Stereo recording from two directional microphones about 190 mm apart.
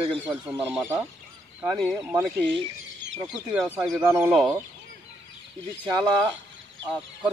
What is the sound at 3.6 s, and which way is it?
Speech, 10° right (ahead or behind).